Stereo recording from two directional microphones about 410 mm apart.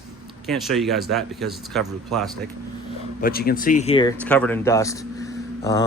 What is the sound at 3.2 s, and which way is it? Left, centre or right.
Speech, left.